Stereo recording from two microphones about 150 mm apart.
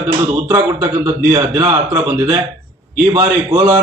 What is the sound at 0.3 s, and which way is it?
A man's voice, 20° right (ahead or behind).